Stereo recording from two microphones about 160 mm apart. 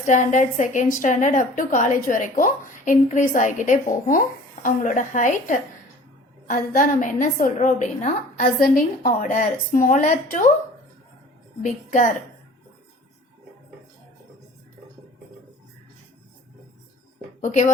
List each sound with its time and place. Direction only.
0.0 s a woman's voice: 50° left (ahead or behind)
11.6 s a woman's voice: 55° left (ahead or behind)
17.4 s speech: 50° left (ahead or behind)